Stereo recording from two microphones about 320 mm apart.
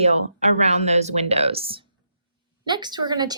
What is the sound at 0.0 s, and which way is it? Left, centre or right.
Speech, right.